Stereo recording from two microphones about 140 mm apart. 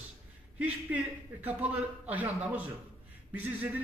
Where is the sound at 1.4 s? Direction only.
10° right (ahead or behind).